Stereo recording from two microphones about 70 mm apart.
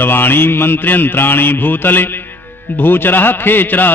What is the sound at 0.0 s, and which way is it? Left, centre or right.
Mantra, left.